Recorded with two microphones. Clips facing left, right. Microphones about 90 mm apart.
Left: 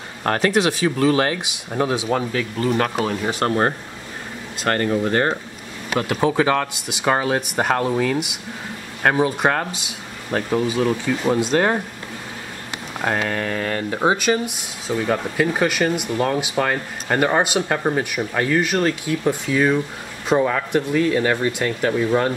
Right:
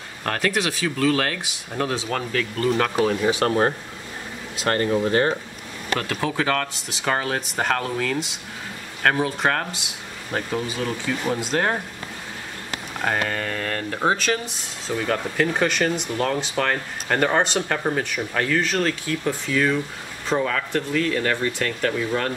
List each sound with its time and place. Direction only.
0.2 s speech: 25° left (ahead or behind)
3.4 s speech: 35° left (ahead or behind)
5.9 s speech: 15° left (ahead or behind)
13.0 s speech: 5° left (ahead or behind); by 22.3 s 20° left (ahead or behind)